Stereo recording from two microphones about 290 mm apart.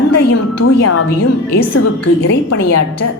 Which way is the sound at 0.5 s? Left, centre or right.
Left.